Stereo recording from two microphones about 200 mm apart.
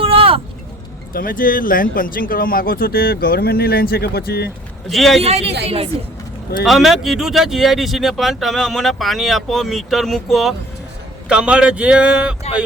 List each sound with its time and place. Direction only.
0.0 s vehicle: 30° right (ahead or behind)
1.1 s speech: 45° left (ahead or behind)
4.9 s speech: centre (ahead or behind)
5.2 s speech: 30° right (ahead or behind)
6.7 s speech: centre (ahead or behind)